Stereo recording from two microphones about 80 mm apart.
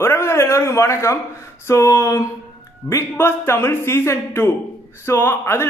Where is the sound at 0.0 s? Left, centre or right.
Left.